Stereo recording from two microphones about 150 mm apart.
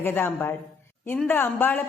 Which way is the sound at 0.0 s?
15° left (ahead or behind).